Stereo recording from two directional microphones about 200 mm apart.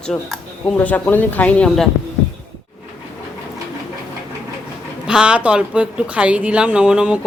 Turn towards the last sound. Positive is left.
turn(degrees=-5)  # may be behind; listen again after turning